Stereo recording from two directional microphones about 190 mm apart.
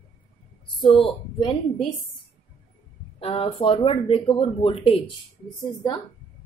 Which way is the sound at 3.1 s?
30° left (ahead or behind).